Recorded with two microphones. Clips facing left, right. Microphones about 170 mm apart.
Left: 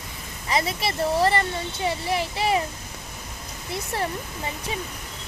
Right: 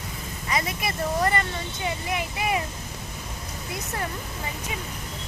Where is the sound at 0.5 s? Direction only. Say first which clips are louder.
Left 3 dB; 30° left (ahead or behind).